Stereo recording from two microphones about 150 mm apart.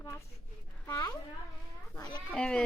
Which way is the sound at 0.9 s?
20° left (ahead or behind).